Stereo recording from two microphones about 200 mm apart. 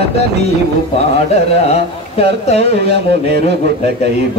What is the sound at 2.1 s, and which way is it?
Speech, 30° left (ahead or behind).